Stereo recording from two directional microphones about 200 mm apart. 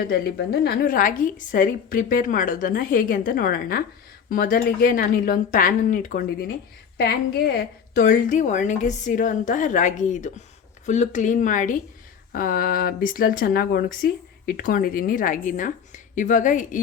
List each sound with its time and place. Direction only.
0.1 s speech: 50° left (ahead or behind)
6.9 s a woman's voice: 55° left (ahead or behind)